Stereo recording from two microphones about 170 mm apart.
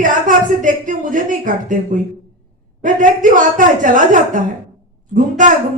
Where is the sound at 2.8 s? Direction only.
50° right (ahead or behind).